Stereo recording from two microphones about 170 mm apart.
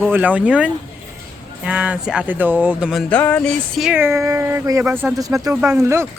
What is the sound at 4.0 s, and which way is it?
Speech, 15° right (ahead or behind).